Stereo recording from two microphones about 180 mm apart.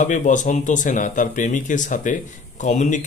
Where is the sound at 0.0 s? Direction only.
45° left (ahead or behind).